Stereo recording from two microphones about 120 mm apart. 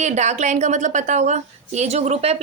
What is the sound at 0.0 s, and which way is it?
A woman's voice, 75° right (ahead or behind).